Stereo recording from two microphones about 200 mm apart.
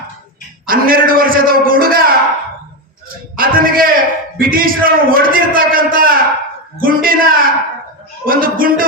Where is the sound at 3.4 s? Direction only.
45° right (ahead or behind).